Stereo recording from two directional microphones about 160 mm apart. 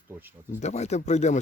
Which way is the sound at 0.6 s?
45° left (ahead or behind).